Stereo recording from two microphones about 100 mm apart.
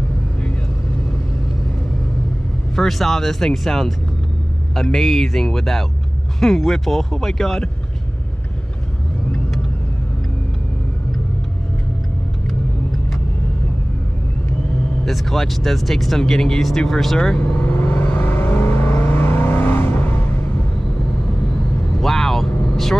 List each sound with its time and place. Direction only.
2.7 s speech: 5° left (ahead or behind)
15.0 s speech: centre (ahead or behind)
17.7 s vehicle: 20° left (ahead or behind)
22.0 s vehicle: 5° left (ahead or behind)